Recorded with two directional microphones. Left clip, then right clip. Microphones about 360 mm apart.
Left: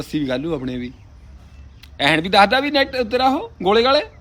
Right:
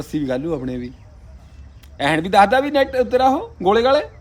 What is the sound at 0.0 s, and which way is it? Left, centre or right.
Speech, centre.